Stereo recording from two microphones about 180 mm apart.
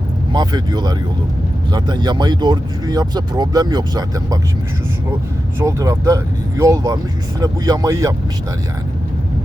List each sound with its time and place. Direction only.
0.3 s speech: 25° right (ahead or behind)
5.5 s speech: 20° right (ahead or behind)